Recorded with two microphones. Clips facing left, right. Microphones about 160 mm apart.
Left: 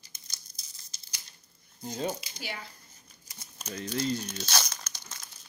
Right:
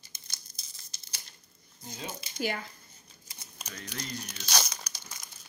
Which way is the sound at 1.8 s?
40° left (ahead or behind).